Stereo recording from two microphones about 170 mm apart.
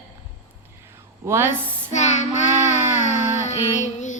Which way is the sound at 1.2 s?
15° right (ahead or behind).